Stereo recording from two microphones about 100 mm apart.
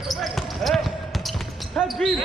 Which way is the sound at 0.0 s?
Centre (ahead or behind).